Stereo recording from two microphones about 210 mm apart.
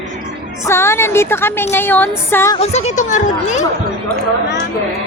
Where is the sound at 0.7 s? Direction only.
10° left (ahead or behind).